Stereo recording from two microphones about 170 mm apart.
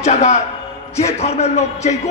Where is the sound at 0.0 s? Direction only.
40° left (ahead or behind).